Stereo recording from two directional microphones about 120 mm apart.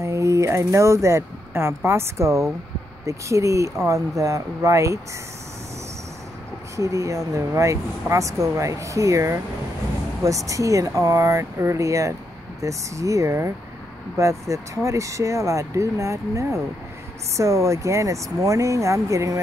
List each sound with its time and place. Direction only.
0.0 s speech: 25° right (ahead or behind)
6.8 s speech: 25° right (ahead or behind)